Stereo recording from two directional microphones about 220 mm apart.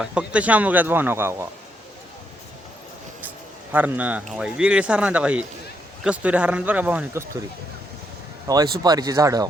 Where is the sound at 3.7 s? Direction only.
10° right (ahead or behind).